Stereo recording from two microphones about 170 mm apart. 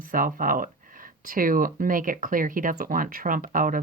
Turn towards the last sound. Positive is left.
turn(degrees=-55)  # may be behind; listen again after turning